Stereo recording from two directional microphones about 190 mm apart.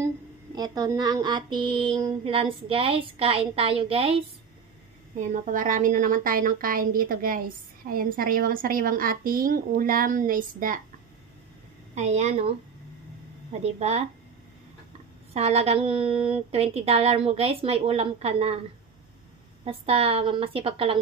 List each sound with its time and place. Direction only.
0.6 s a woman's voice: 20° right (ahead or behind)
5.1 s a woman's voice: 40° right (ahead or behind)
11.9 s a woman's voice: 35° right (ahead or behind)
13.6 s a woman's voice: 35° right (ahead or behind)
15.3 s a woman's voice: 35° right (ahead or behind)
19.6 s a woman's voice: 30° right (ahead or behind)